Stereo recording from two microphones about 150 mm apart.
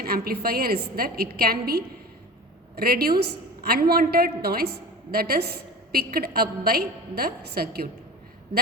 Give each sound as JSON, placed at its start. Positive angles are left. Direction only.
{"t": 0.0, "sound": "a woman's voice", "side_deg": -90}